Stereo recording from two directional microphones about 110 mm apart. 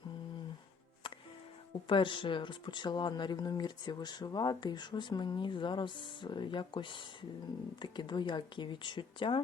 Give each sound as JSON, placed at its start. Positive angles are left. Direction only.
{"t": 1.9, "sound": "speech", "side_deg": 50}